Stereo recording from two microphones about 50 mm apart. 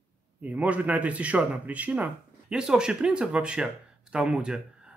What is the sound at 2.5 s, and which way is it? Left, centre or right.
Speech, centre.